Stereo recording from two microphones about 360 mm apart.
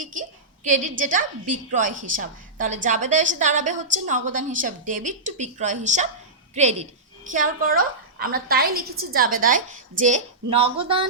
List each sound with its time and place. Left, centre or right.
0.0 s a woman's voice: right